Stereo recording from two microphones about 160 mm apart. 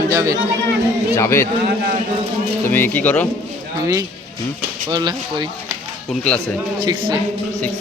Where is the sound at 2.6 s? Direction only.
15° left (ahead or behind).